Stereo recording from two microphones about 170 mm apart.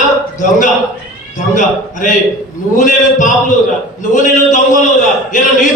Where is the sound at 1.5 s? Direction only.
50° left (ahead or behind).